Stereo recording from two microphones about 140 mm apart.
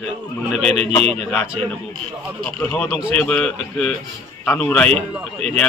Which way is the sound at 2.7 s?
10° left (ahead or behind).